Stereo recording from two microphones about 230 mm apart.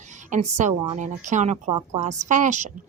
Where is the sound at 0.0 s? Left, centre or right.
Right.